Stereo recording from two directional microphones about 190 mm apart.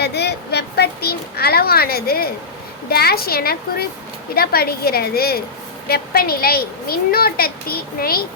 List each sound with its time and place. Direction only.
0.0 s a child's voice: 60° left (ahead or behind)